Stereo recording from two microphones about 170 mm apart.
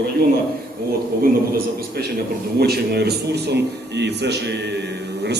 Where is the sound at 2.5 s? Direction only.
70° right (ahead or behind); by 4.8 s 85° right.